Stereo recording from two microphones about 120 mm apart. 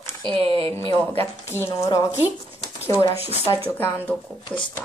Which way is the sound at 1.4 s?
20° left (ahead or behind).